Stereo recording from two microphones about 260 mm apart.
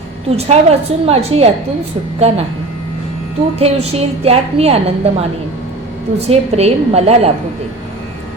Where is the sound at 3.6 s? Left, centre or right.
Right.